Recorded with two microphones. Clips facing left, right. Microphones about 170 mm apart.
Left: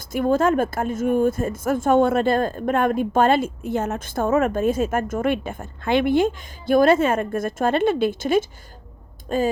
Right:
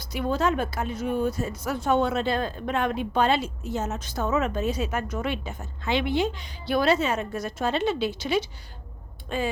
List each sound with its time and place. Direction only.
0.0 s a woman's voice: 50° left (ahead or behind)